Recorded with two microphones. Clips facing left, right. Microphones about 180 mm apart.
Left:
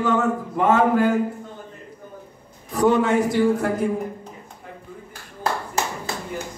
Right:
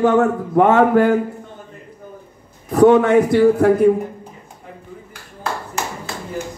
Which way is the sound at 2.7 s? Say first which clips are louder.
Right 7 dB; 60° right (ahead or behind).